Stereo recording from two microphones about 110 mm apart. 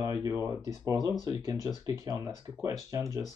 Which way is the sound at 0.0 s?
35° right (ahead or behind).